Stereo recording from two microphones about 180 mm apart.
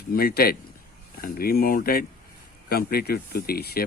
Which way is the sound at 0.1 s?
55° left (ahead or behind).